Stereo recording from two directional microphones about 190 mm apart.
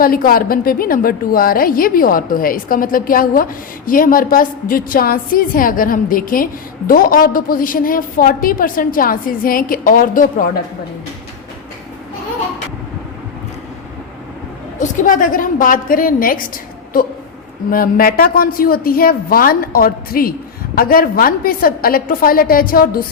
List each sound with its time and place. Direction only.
0.0 s a woman's voice: 50° left (ahead or behind)
14.8 s a woman's voice: 45° left (ahead or behind)
17.7 s a woman's voice: 50° left (ahead or behind)